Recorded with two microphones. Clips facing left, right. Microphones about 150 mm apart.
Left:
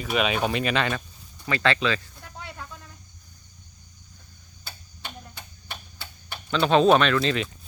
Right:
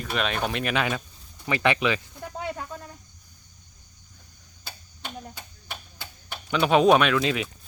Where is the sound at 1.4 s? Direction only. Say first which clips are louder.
Right 1 dB; 15° right (ahead or behind).